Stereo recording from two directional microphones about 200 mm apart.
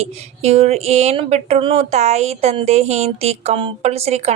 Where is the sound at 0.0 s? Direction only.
30° right (ahead or behind).